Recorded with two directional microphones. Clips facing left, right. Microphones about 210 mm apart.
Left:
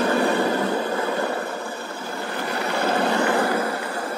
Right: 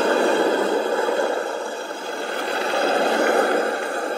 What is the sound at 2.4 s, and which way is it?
Vehicle, 30° right (ahead or behind).